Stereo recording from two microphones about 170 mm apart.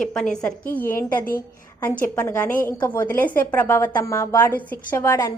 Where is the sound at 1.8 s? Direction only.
10° left (ahead or behind).